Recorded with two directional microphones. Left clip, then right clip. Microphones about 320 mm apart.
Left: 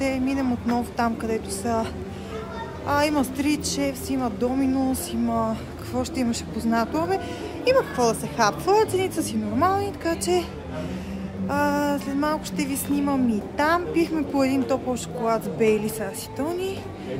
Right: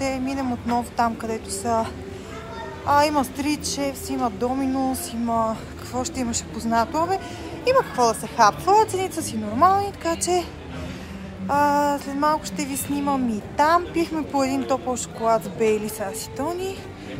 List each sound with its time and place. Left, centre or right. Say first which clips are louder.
0.0 s speech: left 1 dB; centre
2.9 s speech: right 4 dB; centre
11.4 s speech: right 4 dB; centre